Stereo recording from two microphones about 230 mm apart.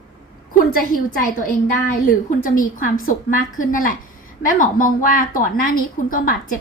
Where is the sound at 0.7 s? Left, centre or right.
Left.